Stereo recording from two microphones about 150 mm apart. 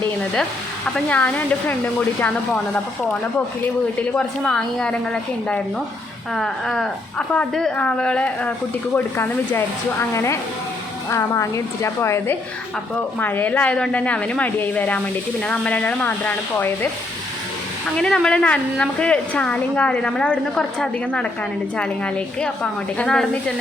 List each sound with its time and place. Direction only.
0.9 s a woman's voice: 10° left (ahead or behind)
17.9 s a woman's voice: 5° left (ahead or behind)